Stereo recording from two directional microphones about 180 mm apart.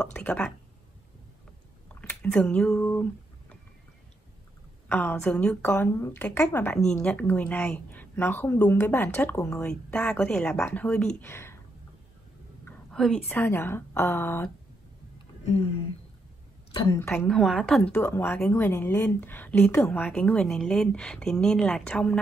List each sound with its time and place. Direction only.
0.0 s a sound: 5° left (ahead or behind)
2.0 s a sound: 5° left (ahead or behind)
4.8 s a woman's voice: 10° left (ahead or behind)
12.6 s a woman's voice: 5° left (ahead or behind)
17.0 s a woman's voice: 15° left (ahead or behind)
17.3 s a woman's voice: centre (ahead or behind)